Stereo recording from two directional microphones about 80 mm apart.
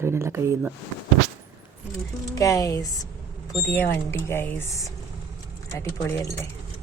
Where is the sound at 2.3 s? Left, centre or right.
Left.